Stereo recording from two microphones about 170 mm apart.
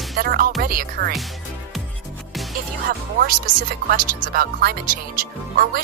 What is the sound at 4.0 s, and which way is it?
Speech, 60° right (ahead or behind).